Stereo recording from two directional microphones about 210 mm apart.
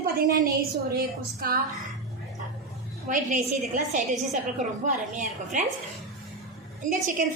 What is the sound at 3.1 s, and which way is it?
A woman's voice, 35° right (ahead or behind).